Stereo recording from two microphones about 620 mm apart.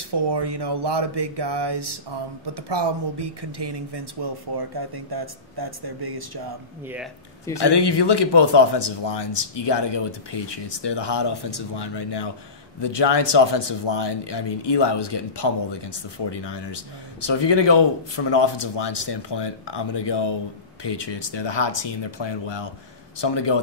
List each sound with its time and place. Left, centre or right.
0.1 s speech: right
6.9 s speech: centre
7.6 s speech: left